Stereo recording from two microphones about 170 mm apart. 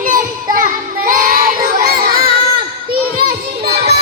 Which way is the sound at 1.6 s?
60° right (ahead or behind).